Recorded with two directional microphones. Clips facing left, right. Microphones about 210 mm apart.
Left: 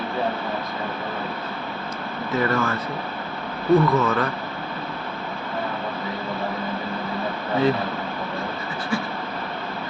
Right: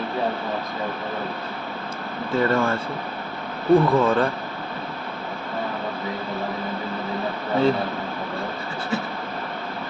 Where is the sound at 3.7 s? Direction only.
30° right (ahead or behind).